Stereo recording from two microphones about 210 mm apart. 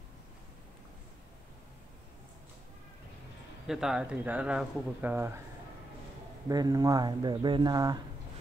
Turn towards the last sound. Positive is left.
turn(degrees=-20)  # may be behind; listen again after turning